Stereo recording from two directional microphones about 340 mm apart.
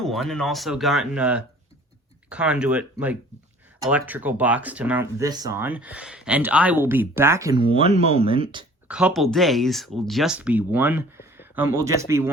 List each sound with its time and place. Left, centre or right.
0.0 s speech: centre
8.9 s speech: centre